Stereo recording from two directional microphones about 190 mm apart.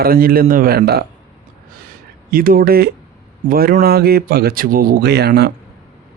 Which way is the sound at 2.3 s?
50° right (ahead or behind).